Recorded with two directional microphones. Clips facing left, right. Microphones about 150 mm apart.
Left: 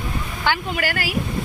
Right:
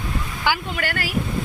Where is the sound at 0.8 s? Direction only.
5° left (ahead or behind).